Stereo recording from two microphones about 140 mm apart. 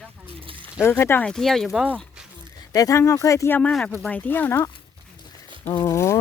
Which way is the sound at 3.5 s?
10° left (ahead or behind).